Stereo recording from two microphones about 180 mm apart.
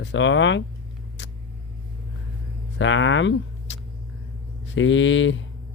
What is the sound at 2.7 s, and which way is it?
Speech, 90° left.